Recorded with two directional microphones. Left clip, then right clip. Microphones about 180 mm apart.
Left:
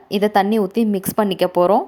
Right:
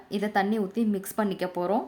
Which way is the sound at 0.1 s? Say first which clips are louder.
Left 10 dB; 35° left (ahead or behind).